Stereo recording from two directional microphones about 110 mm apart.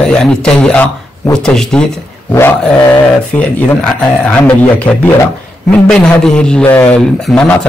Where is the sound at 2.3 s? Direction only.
25° left (ahead or behind).